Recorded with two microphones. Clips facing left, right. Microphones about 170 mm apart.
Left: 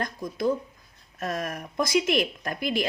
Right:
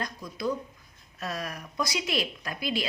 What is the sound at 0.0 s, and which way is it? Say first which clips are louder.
A woman's voice: left 5 dB; 50° left (ahead or behind).